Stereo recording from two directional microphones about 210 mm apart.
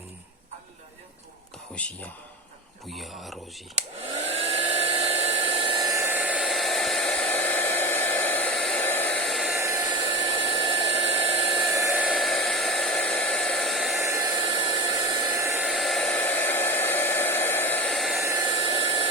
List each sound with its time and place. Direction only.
1.8 s speech: 5° left (ahead or behind)
3.8 s hair dryer: 30° right (ahead or behind); by 9.6 s centre (ahead or behind)
9.6 s hair dryer: 10° right (ahead or behind)
9.9 s hair dryer: 25° right (ahead or behind)
11.9 s hair dryer: 5° right (ahead or behind)
14.0 s hair dryer: 15° right (ahead or behind)
15.6 s hair dryer: centre (ahead or behind)
18.2 s hair dryer: 15° right (ahead or behind)
18.6 s a sound: 25° right (ahead or behind)